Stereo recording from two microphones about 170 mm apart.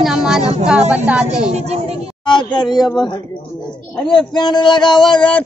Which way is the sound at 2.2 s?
25° left (ahead or behind).